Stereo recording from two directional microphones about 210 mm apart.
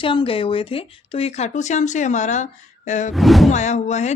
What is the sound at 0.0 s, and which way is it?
Speech, 25° left (ahead or behind).